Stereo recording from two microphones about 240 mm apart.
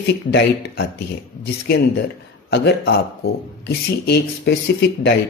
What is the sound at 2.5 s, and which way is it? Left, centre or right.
Speech, left.